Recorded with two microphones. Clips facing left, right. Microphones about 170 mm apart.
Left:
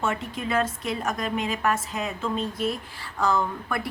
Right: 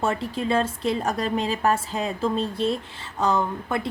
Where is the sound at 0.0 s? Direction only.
35° right (ahead or behind).